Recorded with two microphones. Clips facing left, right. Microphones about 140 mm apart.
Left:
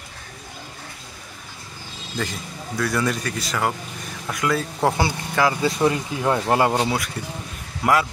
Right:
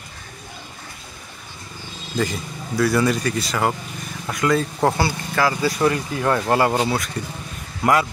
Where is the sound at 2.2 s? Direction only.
5° right (ahead or behind).